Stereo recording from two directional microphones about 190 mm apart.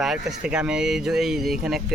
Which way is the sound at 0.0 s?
Centre (ahead or behind).